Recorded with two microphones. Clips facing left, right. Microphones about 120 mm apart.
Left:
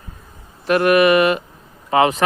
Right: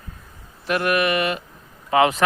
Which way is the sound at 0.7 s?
60° left (ahead or behind).